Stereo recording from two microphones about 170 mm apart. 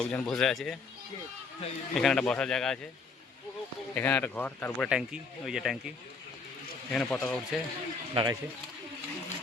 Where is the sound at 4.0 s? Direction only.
10° left (ahead or behind).